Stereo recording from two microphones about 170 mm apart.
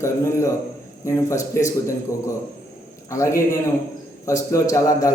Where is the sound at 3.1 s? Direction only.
15° left (ahead or behind).